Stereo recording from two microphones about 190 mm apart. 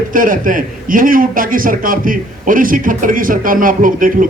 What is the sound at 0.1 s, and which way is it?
A man's voice, 45° right (ahead or behind).